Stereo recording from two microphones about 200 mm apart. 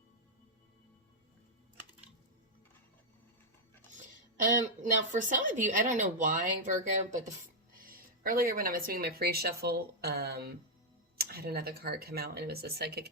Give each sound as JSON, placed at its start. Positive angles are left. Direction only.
{"t": 4.4, "sound": "speech", "side_deg": -40}